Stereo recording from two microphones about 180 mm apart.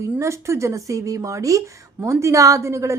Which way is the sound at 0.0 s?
15° right (ahead or behind).